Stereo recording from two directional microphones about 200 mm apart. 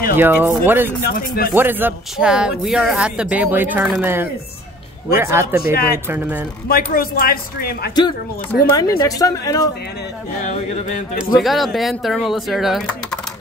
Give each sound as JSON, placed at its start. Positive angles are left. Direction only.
{"t": 0.1, "sound": "speech", "side_deg": -10}
{"t": 1.0, "sound": "speech", "side_deg": 50}
{"t": 1.5, "sound": "speech", "side_deg": -10}
{"t": 5.6, "sound": "speech", "side_deg": 50}
{"t": 6.0, "sound": "speech", "side_deg": -10}
{"t": 6.7, "sound": "speech", "side_deg": 45}
{"t": 8.6, "sound": "speech", "side_deg": 20}
{"t": 11.3, "sound": "speech", "side_deg": 0}